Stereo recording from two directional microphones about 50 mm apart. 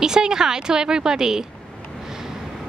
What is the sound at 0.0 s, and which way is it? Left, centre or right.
A woman's voice, centre.